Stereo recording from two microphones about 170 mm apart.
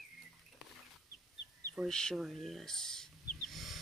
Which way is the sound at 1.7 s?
5° left (ahead or behind).